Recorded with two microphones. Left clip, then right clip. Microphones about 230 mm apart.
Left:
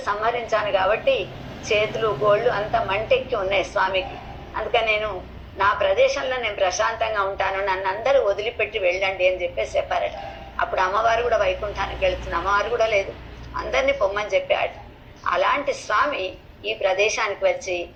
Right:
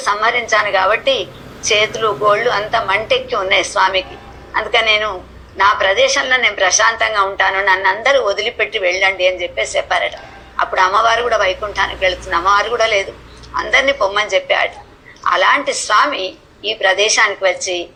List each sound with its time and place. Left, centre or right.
0.0 s a woman's voice: right